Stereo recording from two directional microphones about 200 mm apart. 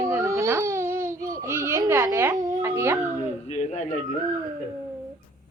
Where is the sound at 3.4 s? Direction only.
35° left (ahead or behind).